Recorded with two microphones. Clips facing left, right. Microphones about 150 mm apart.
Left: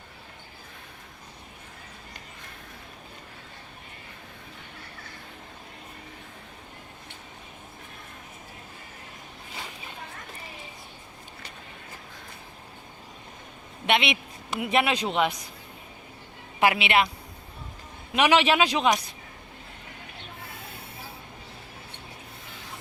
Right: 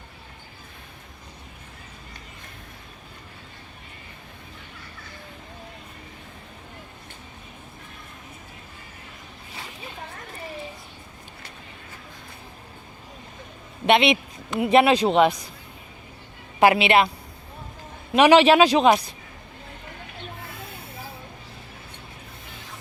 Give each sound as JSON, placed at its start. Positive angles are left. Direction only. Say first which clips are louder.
{"t": 13.8, "sound": "speech", "louder": "right 7 dB", "side_deg": -35}
{"t": 16.6, "sound": "speech", "louder": "right 5 dB", "side_deg": -35}
{"t": 18.1, "sound": "speech", "louder": "right 7 dB", "side_deg": -35}